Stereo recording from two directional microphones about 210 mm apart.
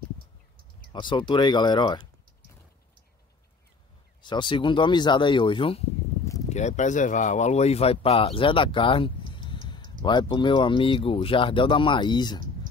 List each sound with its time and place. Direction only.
0.9 s speech: 20° left (ahead or behind)
4.2 s speech: 20° left (ahead or behind)